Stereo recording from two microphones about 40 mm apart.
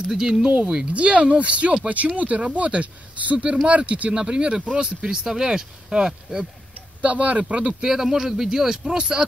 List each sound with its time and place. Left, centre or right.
0.1 s speech: centre
0.9 s speech: right
4.1 s speech: right
7.0 s speech: right
7.8 s speech: centre